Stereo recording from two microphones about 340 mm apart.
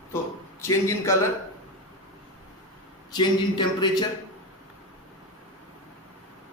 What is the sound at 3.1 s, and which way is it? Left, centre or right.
Speech, centre.